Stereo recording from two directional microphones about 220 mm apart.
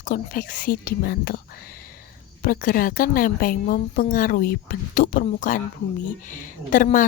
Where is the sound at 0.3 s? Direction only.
40° left (ahead or behind).